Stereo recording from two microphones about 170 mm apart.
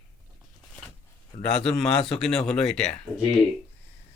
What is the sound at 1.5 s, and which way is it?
Speech, centre (ahead or behind).